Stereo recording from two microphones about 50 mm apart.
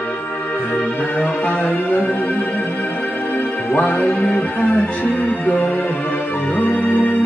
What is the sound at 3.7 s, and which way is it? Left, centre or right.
Music, left.